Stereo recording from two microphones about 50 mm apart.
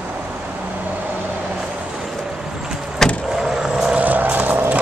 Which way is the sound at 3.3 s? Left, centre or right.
Centre.